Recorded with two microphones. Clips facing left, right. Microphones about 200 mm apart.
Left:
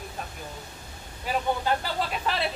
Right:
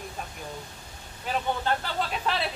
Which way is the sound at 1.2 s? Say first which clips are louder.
Left 1 dB; 5° left (ahead or behind).